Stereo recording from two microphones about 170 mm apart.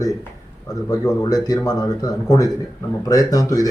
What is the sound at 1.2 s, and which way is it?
A man's voice, 20° left (ahead or behind).